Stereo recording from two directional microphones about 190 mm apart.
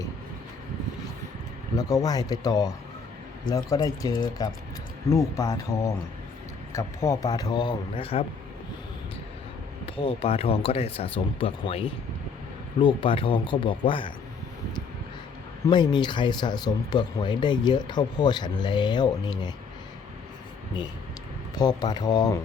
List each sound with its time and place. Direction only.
1.7 s speech: 20° left (ahead or behind)
9.8 s speech: 30° left (ahead or behind)
15.6 s speech: 25° left (ahead or behind)
21.5 s speech: 20° left (ahead or behind)